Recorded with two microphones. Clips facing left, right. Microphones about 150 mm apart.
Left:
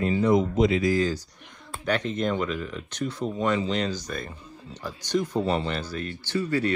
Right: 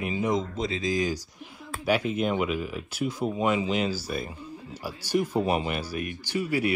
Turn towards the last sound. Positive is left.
turn(degrees=-10)  # may be behind; listen again after turning